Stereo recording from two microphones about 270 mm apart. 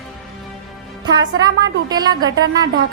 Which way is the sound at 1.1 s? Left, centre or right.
Centre.